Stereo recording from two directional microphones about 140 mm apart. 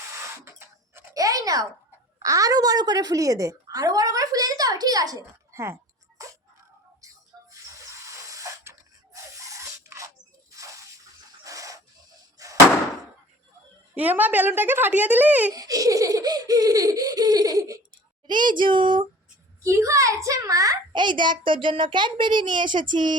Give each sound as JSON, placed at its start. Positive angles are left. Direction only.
{"t": 0.4, "sound": "a sound", "side_deg": -20}
{"t": 2.1, "sound": "a woman's voice", "side_deg": -25}
{"t": 7.0, "sound": "a sound", "side_deg": -25}
{"t": 13.9, "sound": "speech", "side_deg": -10}
{"t": 15.5, "sound": "laughter", "side_deg": -25}
{"t": 18.3, "sound": "a child's voice", "side_deg": -35}
{"t": 19.6, "sound": "a child's voice", "side_deg": -20}